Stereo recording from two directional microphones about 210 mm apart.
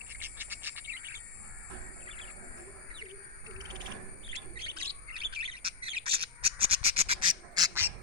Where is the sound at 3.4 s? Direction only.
20° right (ahead or behind).